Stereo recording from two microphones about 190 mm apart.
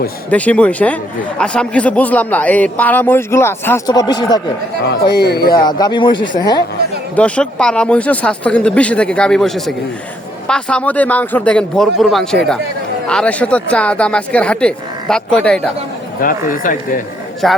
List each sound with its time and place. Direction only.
0.3 s a man's voice: 5° left (ahead or behind)
4.9 s speech: 60° left (ahead or behind)
5.4 s a man's voice: 20° left (ahead or behind)
7.2 s a man's voice: 5° left (ahead or behind)
16.2 s speech: 45° left (ahead or behind)
17.4 s speech: centre (ahead or behind)